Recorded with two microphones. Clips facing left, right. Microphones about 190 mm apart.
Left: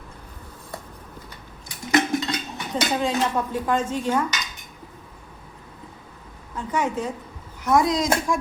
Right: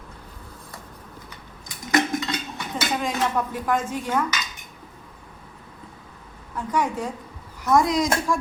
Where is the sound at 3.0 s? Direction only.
25° left (ahead or behind).